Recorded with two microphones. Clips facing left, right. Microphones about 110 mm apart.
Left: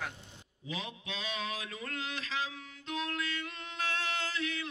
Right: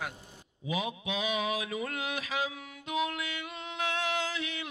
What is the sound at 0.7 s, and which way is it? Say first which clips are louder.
Mantra: right 7 dB; 15° right (ahead or behind).